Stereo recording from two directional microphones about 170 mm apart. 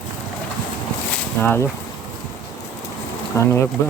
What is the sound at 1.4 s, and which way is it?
Speech, 10° left (ahead or behind).